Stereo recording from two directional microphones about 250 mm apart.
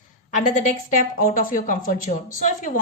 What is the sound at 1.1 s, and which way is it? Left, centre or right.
Speech, left.